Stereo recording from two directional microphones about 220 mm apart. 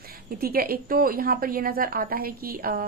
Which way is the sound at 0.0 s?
40° right (ahead or behind).